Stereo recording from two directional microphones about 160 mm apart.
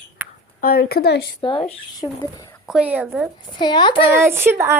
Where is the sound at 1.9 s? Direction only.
20° left (ahead or behind).